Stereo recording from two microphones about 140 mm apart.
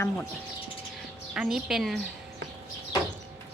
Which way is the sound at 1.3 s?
5° right (ahead or behind).